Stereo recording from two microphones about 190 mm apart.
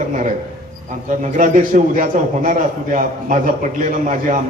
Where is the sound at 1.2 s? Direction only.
40° right (ahead or behind).